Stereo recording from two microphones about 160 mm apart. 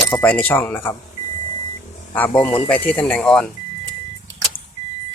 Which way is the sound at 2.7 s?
10° left (ahead or behind).